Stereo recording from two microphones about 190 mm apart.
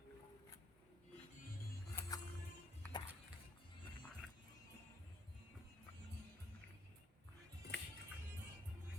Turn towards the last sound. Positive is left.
turn(degrees=60)  # may be behind; listen again after turning